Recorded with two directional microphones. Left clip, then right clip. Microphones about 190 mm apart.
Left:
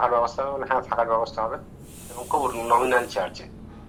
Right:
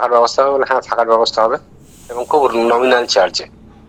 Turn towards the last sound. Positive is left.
turn(degrees=-80)